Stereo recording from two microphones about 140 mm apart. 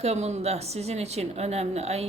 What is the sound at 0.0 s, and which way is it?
Speech, 50° right (ahead or behind).